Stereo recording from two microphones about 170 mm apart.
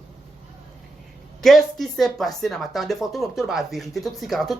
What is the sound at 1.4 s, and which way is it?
Speech, centre (ahead or behind).